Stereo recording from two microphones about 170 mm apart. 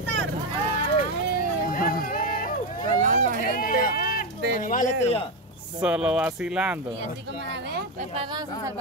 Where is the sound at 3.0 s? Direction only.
55° right (ahead or behind).